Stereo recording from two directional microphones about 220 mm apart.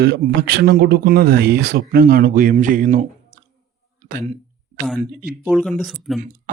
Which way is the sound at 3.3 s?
40° right (ahead or behind).